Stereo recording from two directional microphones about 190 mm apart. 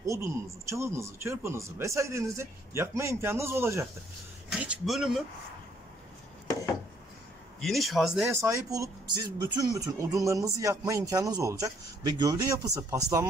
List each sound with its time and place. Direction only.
0.0 s speech: 15° right (ahead or behind)
7.6 s speech: centre (ahead or behind)
8.3 s speech: 15° right (ahead or behind)